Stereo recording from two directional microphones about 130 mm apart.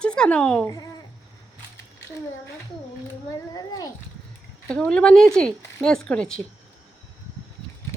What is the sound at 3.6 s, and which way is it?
Speech, 30° left (ahead or behind).